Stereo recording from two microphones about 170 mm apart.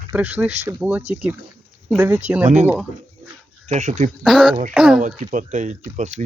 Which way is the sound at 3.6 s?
45° right (ahead or behind).